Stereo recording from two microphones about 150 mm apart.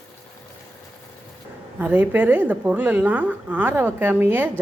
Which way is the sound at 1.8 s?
10° right (ahead or behind).